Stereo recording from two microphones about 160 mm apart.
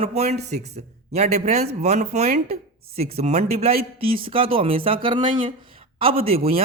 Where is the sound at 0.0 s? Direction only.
40° right (ahead or behind).